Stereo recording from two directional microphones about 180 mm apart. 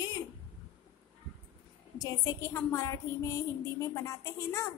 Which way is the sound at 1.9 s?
15° left (ahead or behind).